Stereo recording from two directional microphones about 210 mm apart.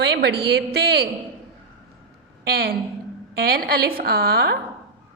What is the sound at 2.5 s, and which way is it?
A woman's voice, 45° right (ahead or behind).